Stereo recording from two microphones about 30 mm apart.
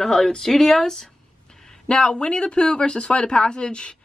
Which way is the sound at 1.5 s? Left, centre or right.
Centre.